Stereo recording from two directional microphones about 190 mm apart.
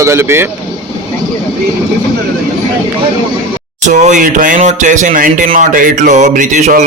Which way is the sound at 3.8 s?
40° right (ahead or behind).